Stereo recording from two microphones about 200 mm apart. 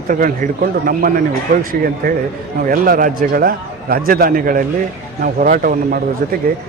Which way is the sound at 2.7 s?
45° right (ahead or behind).